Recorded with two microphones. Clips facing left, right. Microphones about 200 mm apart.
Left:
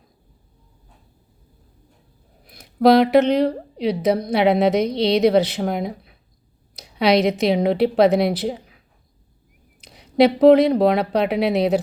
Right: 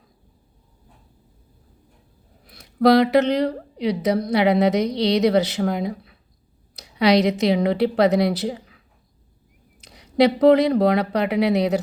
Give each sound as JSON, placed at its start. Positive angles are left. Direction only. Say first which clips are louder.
{"t": 2.5, "sound": "a woman's voice", "louder": "left 1 dB", "side_deg": 20}
{"t": 9.8, "sound": "speech", "louder": "left 2 dB", "side_deg": 20}